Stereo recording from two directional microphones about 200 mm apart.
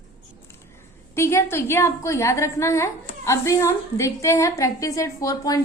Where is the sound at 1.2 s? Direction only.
15° left (ahead or behind).